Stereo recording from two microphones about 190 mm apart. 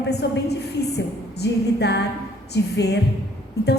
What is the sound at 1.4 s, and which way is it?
A woman's voice, 65° left (ahead or behind).